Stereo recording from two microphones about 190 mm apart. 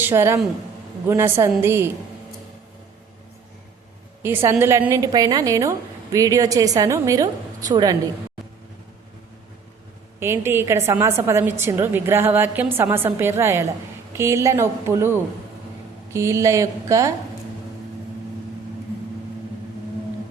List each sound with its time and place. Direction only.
0.0 s a woman's voice: 10° right (ahead or behind)
4.2 s a woman's voice: 10° right (ahead or behind)
10.2 s a woman's voice: 15° right (ahead or behind)